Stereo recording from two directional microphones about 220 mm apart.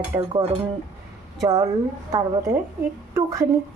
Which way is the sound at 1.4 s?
15° right (ahead or behind).